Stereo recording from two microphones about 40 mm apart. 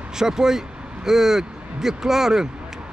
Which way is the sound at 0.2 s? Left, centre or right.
Centre.